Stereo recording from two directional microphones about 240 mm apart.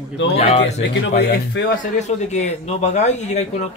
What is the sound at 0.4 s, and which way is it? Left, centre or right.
Speech, left.